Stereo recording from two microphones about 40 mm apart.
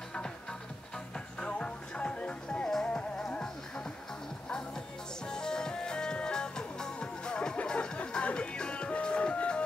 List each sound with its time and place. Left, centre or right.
0.1 s music: centre